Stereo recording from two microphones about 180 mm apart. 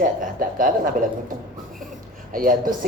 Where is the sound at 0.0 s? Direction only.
50° right (ahead or behind).